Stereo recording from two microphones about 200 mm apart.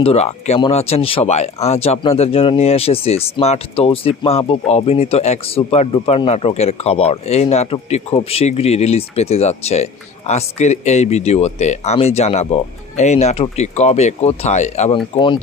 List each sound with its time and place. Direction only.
0.0 s speech: 30° left (ahead or behind)
15.1 s speech: 25° left (ahead or behind)